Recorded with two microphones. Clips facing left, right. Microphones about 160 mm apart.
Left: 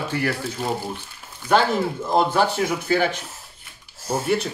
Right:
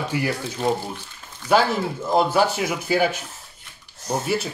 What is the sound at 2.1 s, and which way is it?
Speech, 10° right (ahead or behind).